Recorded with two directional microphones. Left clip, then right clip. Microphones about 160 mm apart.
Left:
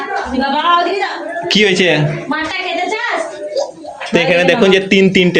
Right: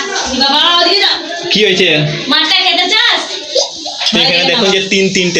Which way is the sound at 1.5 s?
55° left (ahead or behind).